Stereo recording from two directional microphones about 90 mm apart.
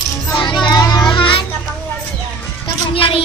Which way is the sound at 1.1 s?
70° left (ahead or behind).